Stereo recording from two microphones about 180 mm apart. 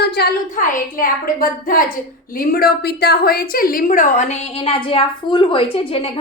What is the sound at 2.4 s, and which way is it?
A woman's voice, 60° left (ahead or behind).